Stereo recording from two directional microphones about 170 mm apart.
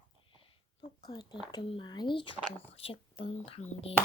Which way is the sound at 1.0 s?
25° left (ahead or behind).